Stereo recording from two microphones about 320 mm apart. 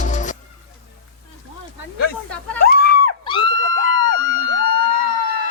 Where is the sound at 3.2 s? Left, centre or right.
Centre.